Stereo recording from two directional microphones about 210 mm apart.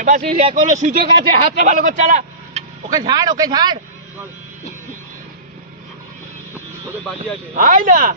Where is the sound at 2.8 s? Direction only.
15° right (ahead or behind).